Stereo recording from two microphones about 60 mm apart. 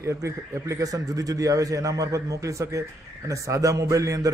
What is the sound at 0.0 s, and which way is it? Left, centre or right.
A man's voice, right.